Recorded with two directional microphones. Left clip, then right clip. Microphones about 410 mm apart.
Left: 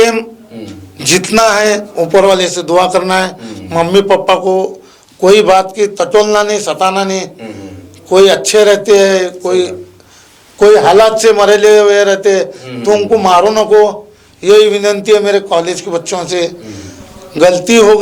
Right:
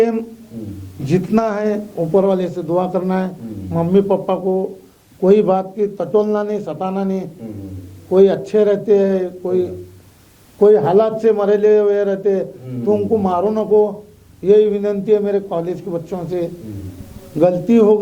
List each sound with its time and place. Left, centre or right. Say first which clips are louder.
0.0 s a man's voice: left 7 dB; centre
4.0 s speech: left 8 dB; centre
5.2 s a man's voice: left 7 dB; centre
13.7 s a man's voice: left 7 dB; centre
14.4 s a man's voice: left 6 dB; centre